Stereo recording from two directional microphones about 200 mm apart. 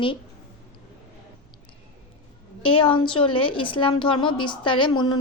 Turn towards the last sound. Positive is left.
turn(degrees=25)  # may be behind; listen again after turning